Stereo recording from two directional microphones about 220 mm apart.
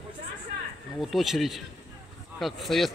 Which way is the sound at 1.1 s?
Centre (ahead or behind).